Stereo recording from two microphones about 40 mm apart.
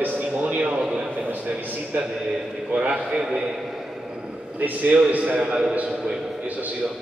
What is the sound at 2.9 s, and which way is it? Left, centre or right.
Speech, centre.